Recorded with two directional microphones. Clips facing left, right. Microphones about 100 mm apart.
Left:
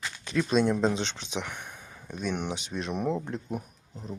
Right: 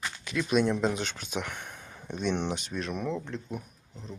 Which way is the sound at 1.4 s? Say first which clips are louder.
Even; 15° left (ahead or behind).